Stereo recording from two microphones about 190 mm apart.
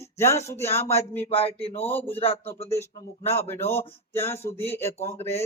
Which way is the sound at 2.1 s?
30° left (ahead or behind).